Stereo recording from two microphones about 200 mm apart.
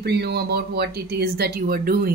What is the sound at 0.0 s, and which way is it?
A woman's voice, 55° right (ahead or behind).